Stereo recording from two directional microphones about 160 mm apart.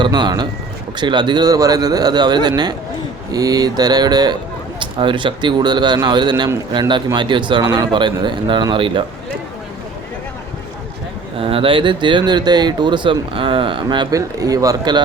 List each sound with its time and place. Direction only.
0.0 s speech: 30° right (ahead or behind)
11.3 s speech: 35° right (ahead or behind)